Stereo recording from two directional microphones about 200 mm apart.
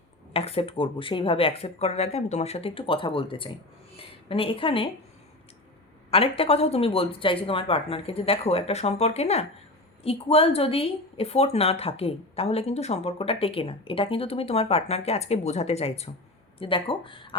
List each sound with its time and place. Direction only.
0.3 s a woman's voice: 30° left (ahead or behind)
6.1 s a woman's voice: 30° left (ahead or behind)